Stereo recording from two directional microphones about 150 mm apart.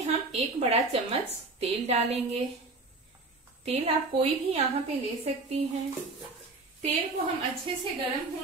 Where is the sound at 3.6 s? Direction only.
40° right (ahead or behind).